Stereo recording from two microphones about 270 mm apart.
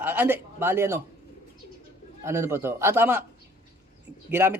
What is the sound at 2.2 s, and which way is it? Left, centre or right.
Speech, centre.